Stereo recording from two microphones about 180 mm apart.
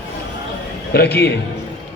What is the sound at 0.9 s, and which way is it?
Speech, 65° left (ahead or behind).